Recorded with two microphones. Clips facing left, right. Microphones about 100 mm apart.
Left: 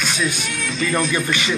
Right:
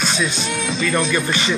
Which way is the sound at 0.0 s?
25° right (ahead or behind).